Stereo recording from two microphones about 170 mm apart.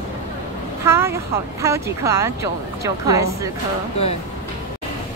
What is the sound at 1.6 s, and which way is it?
Speech, 15° right (ahead or behind).